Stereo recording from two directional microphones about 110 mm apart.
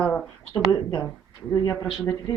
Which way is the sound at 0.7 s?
30° left (ahead or behind).